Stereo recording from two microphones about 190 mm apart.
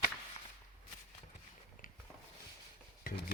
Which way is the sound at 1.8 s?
45° left (ahead or behind).